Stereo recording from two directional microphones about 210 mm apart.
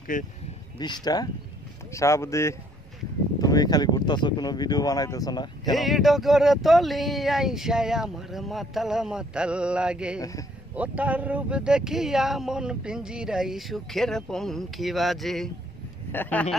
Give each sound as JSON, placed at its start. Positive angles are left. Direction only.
{"t": 0.1, "sound": "speech", "side_deg": 40}
{"t": 0.7, "sound": "speech", "side_deg": 20}
{"t": 5.8, "sound": "speech", "side_deg": 0}